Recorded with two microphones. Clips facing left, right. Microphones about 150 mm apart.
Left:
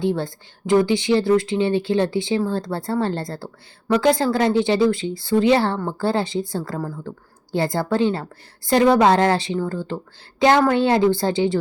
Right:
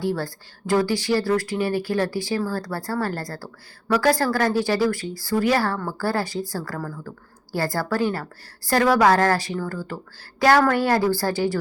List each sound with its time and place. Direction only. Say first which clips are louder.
0.0 s speech: left 3 dB; 20° left (ahead or behind)